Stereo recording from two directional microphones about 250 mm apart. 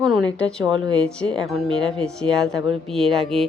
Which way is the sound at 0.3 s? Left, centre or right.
Centre.